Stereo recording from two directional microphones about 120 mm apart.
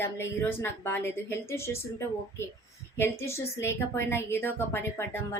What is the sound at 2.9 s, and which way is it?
A woman's voice, 20° left (ahead or behind).